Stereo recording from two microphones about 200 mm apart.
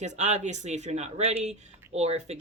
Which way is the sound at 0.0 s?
35° right (ahead or behind).